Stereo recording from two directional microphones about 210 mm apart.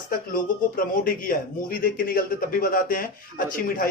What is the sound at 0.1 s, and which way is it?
A man's voice, 40° left (ahead or behind).